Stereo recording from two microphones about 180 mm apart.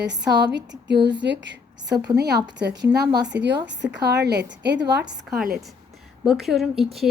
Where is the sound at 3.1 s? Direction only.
75° right (ahead or behind).